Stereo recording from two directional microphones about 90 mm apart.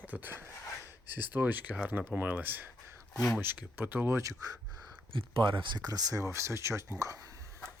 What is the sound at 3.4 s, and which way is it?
Speech, 25° right (ahead or behind).